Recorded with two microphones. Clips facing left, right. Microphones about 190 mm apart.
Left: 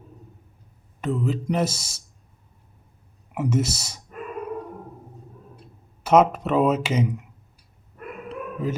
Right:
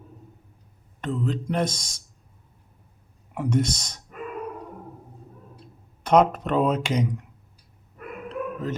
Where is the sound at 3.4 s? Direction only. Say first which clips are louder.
Even; 5° left (ahead or behind).